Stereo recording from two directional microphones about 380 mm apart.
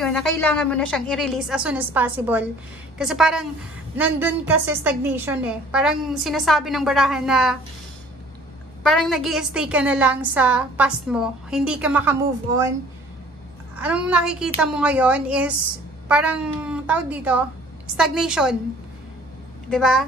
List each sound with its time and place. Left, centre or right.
0.0 s a woman's voice: centre
8.8 s a woman's voice: centre
13.7 s a woman's voice: centre
19.7 s a woman's voice: centre